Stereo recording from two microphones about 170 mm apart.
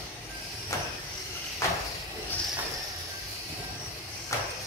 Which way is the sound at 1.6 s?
15° left (ahead or behind).